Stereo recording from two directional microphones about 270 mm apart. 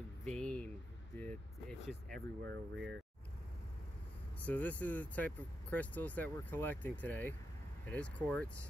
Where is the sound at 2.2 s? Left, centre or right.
Right.